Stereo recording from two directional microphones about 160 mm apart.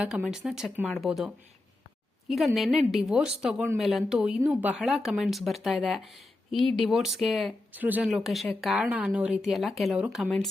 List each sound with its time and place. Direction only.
0.0 s speech: 5° right (ahead or behind)
2.3 s speech: centre (ahead or behind)
7.7 s speech: 10° right (ahead or behind)